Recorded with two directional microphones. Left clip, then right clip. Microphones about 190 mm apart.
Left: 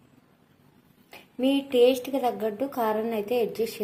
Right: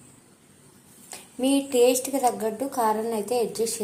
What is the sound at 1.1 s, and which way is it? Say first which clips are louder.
A woman's voice: right 1 dB; 10° left (ahead or behind).